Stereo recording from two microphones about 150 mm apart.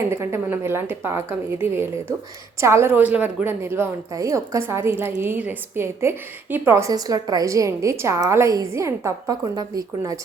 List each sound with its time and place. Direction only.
0.1 s a woman's voice: 15° right (ahead or behind)